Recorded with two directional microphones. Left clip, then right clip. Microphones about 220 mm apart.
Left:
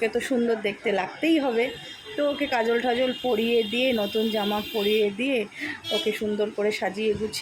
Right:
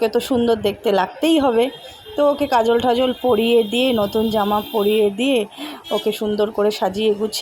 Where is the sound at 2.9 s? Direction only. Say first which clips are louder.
Right 7 dB; 30° right (ahead or behind).